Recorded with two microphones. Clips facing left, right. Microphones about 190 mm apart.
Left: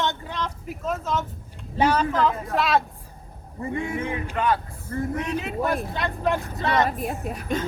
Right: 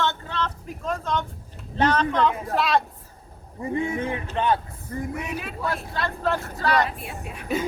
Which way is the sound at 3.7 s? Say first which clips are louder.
Right 2 dB; 30° right (ahead or behind).